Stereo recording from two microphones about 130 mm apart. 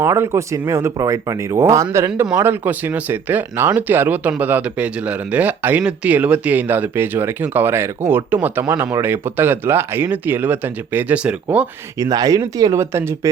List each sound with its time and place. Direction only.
0.0 s speech: 20° right (ahead or behind)
8.6 s speech: 25° right (ahead or behind); by 11.3 s 10° right (ahead or behind)
11.9 s speech: 30° right (ahead or behind)